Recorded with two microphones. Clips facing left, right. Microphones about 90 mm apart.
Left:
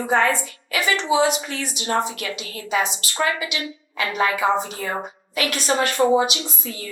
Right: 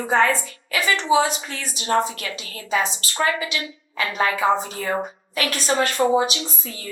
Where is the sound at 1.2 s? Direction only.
35° right (ahead or behind).